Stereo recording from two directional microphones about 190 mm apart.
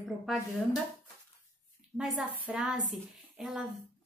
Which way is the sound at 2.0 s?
5° right (ahead or behind).